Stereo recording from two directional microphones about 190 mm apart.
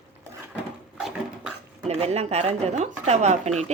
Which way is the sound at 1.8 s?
35° right (ahead or behind).